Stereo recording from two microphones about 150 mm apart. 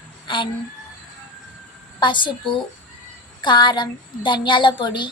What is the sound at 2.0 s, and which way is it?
A woman's voice, 30° left (ahead or behind).